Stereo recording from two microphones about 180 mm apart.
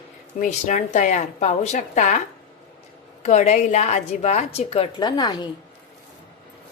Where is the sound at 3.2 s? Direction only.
40° left (ahead or behind); by 5.5 s 20° left (ahead or behind).